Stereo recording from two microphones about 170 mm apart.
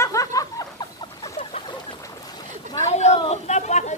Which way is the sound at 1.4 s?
30° left (ahead or behind).